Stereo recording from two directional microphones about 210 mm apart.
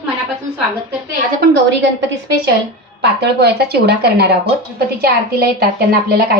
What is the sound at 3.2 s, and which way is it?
Speech, 50° right (ahead or behind).